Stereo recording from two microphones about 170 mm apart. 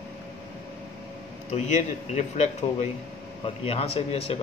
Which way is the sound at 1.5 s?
40° left (ahead or behind).